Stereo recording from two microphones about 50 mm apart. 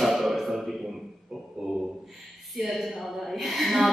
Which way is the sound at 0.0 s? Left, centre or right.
Centre.